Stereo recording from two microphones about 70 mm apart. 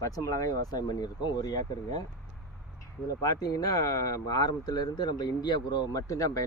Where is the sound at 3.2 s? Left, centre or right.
Left.